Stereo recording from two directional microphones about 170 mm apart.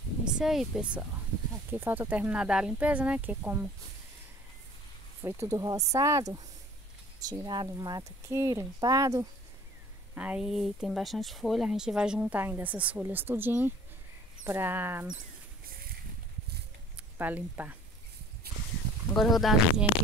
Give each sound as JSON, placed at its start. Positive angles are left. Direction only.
{"t": 0.2, "sound": "speech", "side_deg": -5}
{"t": 5.2, "sound": "speech", "side_deg": -15}
{"t": 10.1, "sound": "speech", "side_deg": -5}
{"t": 17.2, "sound": "speech", "side_deg": -10}
{"t": 18.4, "sound": "a sound", "side_deg": -70}
{"t": 19.1, "sound": "speech", "side_deg": 0}